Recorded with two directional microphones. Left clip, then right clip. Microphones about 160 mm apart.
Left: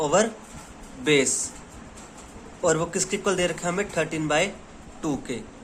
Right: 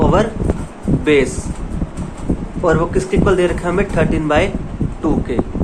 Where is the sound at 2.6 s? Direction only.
30° left (ahead or behind).